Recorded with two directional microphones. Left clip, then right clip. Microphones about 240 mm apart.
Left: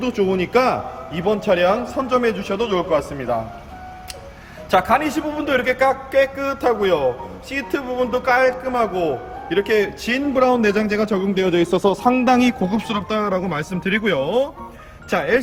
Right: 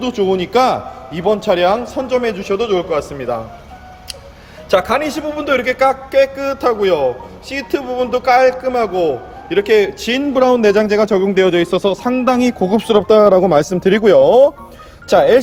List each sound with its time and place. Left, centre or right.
0.0 s a man's voice: centre
4.7 s a man's voice: centre
12.7 s speech: centre